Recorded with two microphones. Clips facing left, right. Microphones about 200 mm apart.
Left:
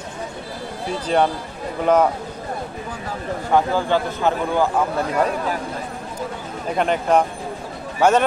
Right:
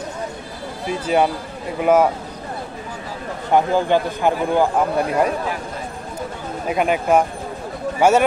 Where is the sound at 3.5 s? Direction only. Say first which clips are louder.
Right 2 dB; 15° right (ahead or behind).